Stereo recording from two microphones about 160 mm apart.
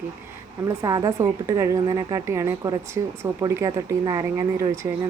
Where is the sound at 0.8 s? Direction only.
20° right (ahead or behind).